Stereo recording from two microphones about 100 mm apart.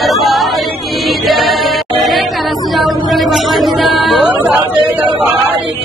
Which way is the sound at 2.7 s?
Centre (ahead or behind).